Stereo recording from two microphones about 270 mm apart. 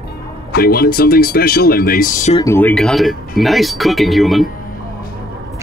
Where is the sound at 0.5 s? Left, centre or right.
Left.